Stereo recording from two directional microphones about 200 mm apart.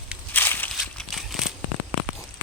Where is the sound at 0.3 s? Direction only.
10° left (ahead or behind).